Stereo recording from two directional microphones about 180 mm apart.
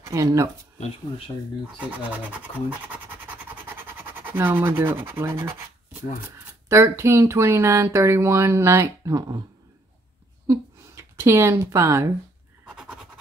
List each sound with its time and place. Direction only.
0.0 s speech: 15° right (ahead or behind)
0.7 s speech: 30° left (ahead or behind)
1.8 s speech: 10° right (ahead or behind)
2.9 s a sound: 10° right (ahead or behind)
6.3 s speech: 15° right (ahead or behind)
10.4 s speech: 15° right (ahead or behind)
12.6 s scratch: 5° right (ahead or behind)